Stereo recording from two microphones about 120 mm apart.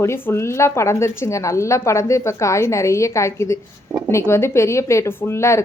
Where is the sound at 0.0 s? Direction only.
20° left (ahead or behind).